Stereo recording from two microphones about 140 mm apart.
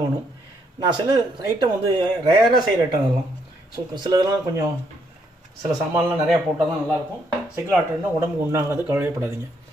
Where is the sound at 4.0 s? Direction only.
30° right (ahead or behind).